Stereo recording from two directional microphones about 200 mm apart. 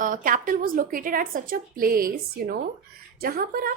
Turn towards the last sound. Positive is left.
turn(degrees=-45)  # may be behind; listen again after turning